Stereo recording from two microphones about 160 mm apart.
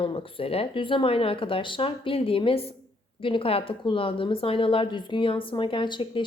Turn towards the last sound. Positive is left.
turn(degrees=30)  # may be behind; listen again after turning